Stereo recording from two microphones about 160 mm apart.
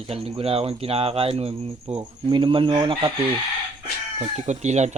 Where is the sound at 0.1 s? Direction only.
35° right (ahead or behind).